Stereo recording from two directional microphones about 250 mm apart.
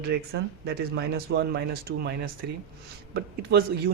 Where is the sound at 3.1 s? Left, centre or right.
Right.